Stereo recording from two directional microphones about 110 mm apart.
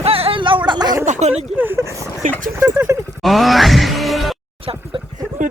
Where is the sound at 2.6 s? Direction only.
25° right (ahead or behind).